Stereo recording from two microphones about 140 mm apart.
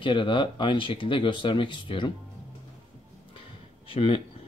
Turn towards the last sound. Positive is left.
turn(degrees=40)  # may be behind; listen again after turning